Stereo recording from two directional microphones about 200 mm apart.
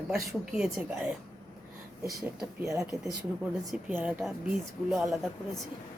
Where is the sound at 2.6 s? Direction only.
15° right (ahead or behind).